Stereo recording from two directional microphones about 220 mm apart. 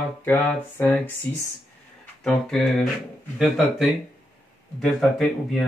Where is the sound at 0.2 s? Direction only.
10° left (ahead or behind).